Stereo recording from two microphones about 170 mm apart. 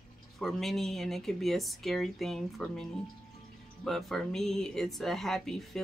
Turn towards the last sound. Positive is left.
turn(degrees=0)  # may be behind; listen again after turning